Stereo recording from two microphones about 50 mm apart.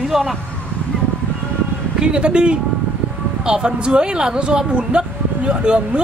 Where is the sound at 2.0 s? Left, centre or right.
Centre.